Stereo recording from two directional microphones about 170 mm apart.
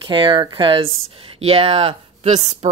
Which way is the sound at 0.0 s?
30° right (ahead or behind).